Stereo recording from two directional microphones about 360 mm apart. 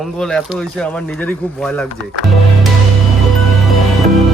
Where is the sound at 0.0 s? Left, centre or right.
Centre.